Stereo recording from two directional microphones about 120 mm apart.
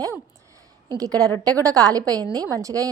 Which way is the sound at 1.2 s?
25° right (ahead or behind).